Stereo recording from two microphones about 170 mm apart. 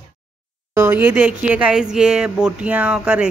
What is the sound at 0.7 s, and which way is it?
Speech, 15° right (ahead or behind).